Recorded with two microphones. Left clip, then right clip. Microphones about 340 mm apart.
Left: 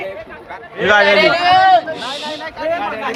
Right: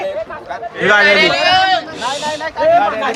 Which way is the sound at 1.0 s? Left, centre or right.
Centre.